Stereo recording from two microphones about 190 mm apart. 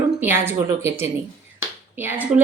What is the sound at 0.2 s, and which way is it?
A woman's voice, 10° right (ahead or behind).